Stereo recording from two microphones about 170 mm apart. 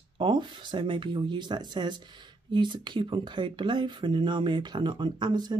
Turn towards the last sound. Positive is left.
turn(degrees=-25)  # may be behind; listen again after turning